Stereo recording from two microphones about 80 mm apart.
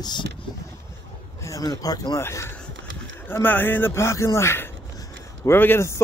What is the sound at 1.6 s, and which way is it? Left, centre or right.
Speech, left.